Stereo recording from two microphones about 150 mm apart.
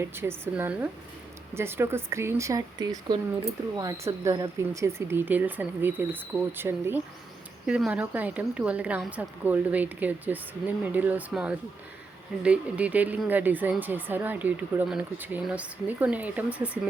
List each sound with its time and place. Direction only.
0.0 s speech: 15° right (ahead or behind)